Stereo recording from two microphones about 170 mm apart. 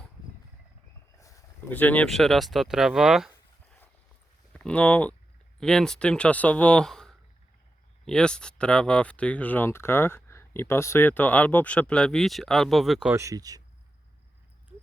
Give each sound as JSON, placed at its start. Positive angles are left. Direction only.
{"t": 1.2, "sound": "speech", "side_deg": 15}
{"t": 4.5, "sound": "speech", "side_deg": 10}
{"t": 13.1, "sound": "speech", "side_deg": -20}